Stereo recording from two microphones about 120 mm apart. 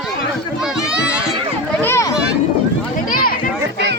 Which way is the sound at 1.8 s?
20° left (ahead or behind).